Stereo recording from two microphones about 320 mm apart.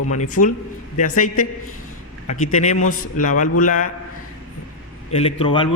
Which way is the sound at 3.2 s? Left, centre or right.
Left.